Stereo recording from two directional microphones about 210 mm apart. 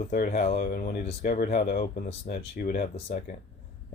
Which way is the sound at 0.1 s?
40° left (ahead or behind).